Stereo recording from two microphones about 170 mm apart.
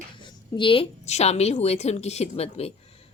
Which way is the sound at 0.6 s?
30° left (ahead or behind).